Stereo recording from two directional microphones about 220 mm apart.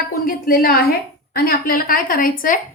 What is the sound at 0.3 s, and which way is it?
A woman's voice, 40° left (ahead or behind).